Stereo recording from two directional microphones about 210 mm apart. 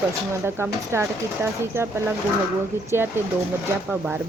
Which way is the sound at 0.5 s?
10° right (ahead or behind).